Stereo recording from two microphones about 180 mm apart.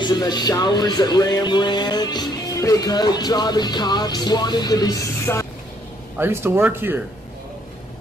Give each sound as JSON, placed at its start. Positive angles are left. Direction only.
{"t": 0.0, "sound": "speech", "side_deg": 25}
{"t": 6.1, "sound": "speech", "side_deg": -15}